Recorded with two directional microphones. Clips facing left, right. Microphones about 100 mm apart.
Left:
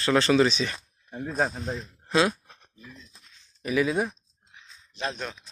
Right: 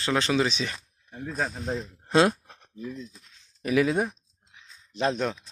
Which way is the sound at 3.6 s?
70° right (ahead or behind).